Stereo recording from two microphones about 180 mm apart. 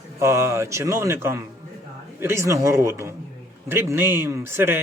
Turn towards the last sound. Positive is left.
turn(degrees=-15)  # may be behind; listen again after turning